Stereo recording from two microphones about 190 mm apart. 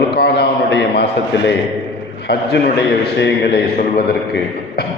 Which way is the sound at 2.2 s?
65° left (ahead or behind).